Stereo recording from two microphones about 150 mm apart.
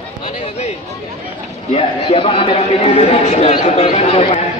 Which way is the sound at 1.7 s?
40° left (ahead or behind).